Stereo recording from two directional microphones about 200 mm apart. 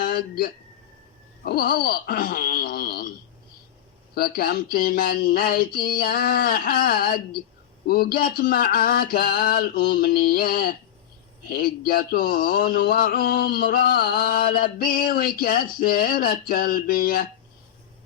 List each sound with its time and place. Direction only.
0.0 s speech: 50° left (ahead or behind)
4.1 s speech: 50° left (ahead or behind)